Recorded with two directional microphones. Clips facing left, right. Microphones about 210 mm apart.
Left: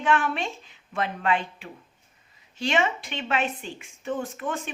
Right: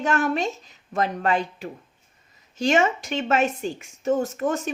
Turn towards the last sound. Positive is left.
turn(degrees=-40)  # may be behind; listen again after turning